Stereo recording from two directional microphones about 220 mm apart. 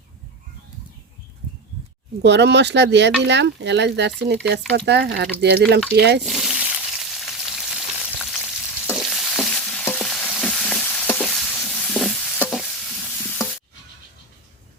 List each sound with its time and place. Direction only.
2.2 s speech: 50° right (ahead or behind)
6.2 s frying: centre (ahead or behind)
8.9 s stir: centre (ahead or behind)